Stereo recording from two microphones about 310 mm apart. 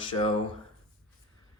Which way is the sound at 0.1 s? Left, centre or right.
Centre.